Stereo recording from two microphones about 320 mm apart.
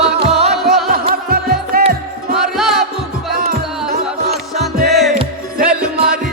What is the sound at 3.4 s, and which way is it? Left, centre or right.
Music, right.